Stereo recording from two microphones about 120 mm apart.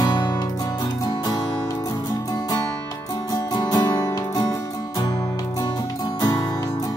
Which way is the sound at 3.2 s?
35° left (ahead or behind).